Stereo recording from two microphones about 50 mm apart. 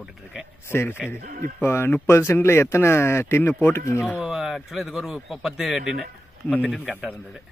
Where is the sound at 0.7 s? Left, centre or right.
Left.